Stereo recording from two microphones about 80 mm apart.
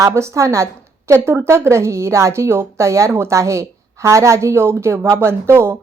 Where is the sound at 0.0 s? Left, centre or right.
Right.